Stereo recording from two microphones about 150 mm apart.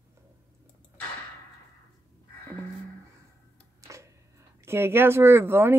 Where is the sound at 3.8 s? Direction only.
20° right (ahead or behind).